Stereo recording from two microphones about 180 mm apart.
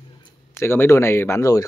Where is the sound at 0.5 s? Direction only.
10° left (ahead or behind).